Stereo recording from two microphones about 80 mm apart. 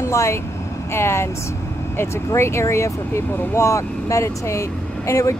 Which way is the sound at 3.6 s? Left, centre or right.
Left.